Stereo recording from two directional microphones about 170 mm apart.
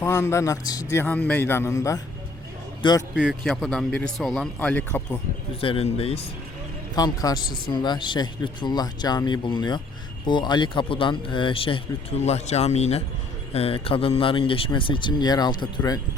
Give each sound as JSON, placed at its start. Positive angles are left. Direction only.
{"t": 0.0, "sound": "a man's voice", "side_deg": 15}
{"t": 3.2, "sound": "speech", "side_deg": 0}
{"t": 5.5, "sound": "speech", "side_deg": 35}
{"t": 6.9, "sound": "speech", "side_deg": 20}